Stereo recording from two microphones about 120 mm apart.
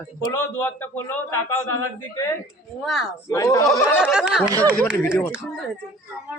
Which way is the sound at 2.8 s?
5° right (ahead or behind).